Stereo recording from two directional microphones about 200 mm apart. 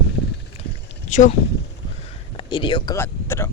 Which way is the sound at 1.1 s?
35° left (ahead or behind).